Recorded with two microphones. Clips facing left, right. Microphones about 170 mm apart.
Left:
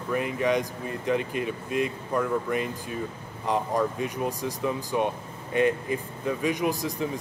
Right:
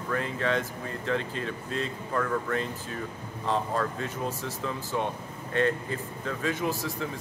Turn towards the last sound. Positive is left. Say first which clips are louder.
# left 3 dB
turn(degrees=15)  # may be behind; listen again after turning